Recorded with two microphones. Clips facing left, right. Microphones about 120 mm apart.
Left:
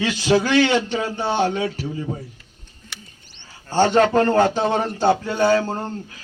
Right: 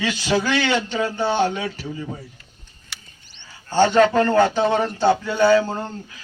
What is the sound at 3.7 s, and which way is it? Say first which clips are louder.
A man's voice: even; 40° left (ahead or behind).